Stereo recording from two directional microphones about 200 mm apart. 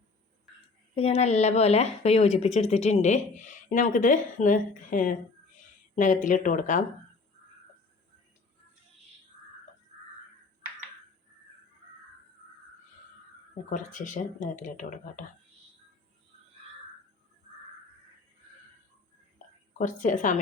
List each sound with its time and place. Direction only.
0.9 s speech: 30° left (ahead or behind)
13.7 s speech: 40° left (ahead or behind)
19.8 s speech: 40° left (ahead or behind)